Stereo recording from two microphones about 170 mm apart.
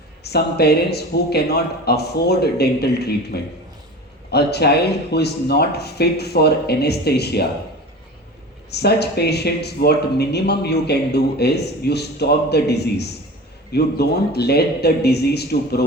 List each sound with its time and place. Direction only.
0.2 s speech: 70° left (ahead or behind)
8.7 s speech: 75° left (ahead or behind)